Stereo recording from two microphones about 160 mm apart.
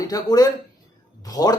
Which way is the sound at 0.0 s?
25° left (ahead or behind).